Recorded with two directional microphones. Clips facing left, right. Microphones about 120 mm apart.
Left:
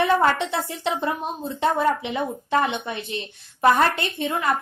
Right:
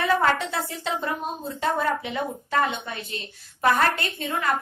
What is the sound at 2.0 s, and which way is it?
A woman's voice, 25° left (ahead or behind).